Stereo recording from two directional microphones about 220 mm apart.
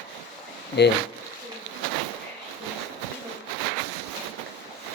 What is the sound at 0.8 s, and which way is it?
Speech, 50° left (ahead or behind).